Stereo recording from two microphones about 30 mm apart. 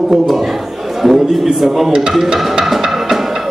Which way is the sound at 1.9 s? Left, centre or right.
Right.